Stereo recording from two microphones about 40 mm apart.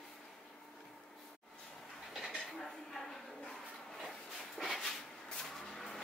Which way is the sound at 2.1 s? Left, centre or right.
Centre.